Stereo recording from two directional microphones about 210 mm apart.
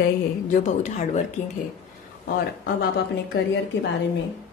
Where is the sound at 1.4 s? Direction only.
35° left (ahead or behind).